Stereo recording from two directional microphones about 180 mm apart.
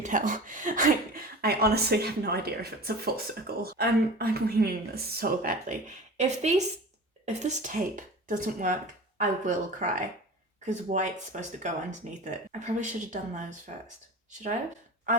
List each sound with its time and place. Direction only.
0.0 s speech: 45° right (ahead or behind)